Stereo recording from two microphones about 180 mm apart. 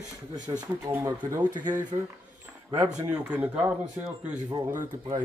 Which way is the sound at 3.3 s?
10° right (ahead or behind).